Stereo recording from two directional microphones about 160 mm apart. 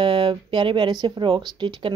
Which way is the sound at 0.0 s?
30° right (ahead or behind).